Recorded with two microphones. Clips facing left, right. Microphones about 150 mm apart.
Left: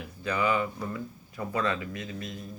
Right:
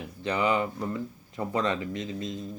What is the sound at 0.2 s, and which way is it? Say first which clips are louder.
Speech: right 1 dB; 20° right (ahead or behind).